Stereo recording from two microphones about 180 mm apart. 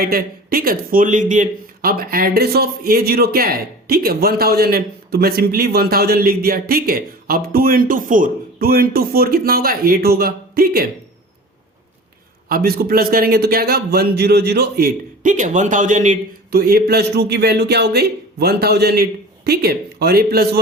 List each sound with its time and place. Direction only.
0.0 s a man's voice: 55° right (ahead or behind)
12.5 s a man's voice: 55° right (ahead or behind)